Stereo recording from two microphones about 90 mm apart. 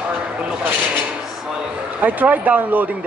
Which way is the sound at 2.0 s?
20° right (ahead or behind).